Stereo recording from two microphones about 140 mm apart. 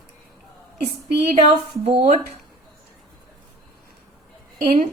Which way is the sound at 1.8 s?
45° right (ahead or behind).